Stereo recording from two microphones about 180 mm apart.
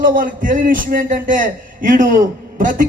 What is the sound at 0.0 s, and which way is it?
A man's voice, 50° right (ahead or behind).